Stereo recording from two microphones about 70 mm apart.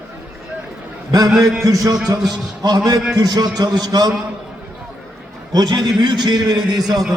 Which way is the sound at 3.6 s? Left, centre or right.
Right.